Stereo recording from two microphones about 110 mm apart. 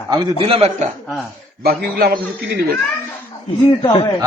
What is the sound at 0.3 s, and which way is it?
Speech, 60° right (ahead or behind).